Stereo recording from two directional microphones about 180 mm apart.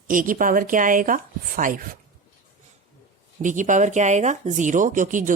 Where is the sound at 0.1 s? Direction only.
50° right (ahead or behind).